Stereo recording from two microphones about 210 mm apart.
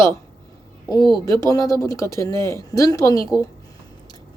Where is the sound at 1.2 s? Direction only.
15° left (ahead or behind).